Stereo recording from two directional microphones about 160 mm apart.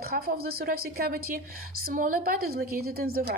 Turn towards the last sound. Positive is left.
turn(degrees=-70)  # may be behind; listen again after turning